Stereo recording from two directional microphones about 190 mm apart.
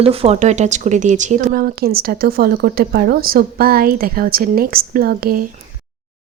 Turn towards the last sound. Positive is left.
turn(degrees=-50)  # may be behind; listen again after turning